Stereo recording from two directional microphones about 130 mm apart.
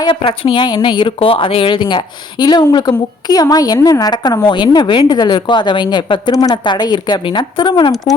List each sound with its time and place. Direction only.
0.0 s speech: 40° left (ahead or behind)